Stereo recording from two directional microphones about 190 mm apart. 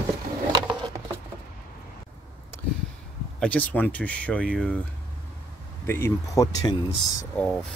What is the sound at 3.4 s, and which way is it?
Speech, 10° left (ahead or behind).